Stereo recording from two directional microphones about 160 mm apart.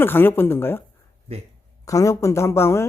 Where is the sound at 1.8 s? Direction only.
20° left (ahead or behind).